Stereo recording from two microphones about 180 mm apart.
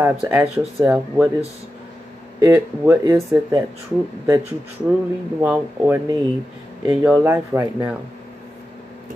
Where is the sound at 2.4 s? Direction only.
15° right (ahead or behind).